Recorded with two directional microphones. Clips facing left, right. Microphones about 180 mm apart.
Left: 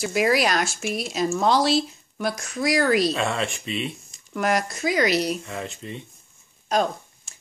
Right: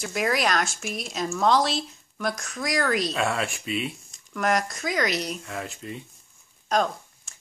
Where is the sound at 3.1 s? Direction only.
5° right (ahead or behind).